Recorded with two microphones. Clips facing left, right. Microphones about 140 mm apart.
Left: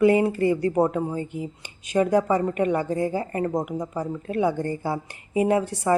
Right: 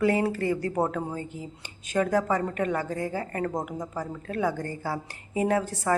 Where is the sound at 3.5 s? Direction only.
5° left (ahead or behind).